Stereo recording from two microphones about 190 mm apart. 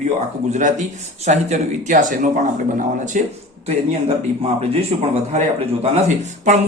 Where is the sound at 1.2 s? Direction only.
35° right (ahead or behind).